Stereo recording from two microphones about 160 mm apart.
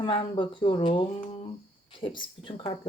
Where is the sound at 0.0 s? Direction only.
35° left (ahead or behind).